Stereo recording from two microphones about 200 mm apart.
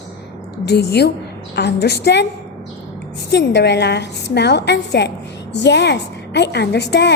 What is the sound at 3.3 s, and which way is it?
A woman's voice, 60° left (ahead or behind).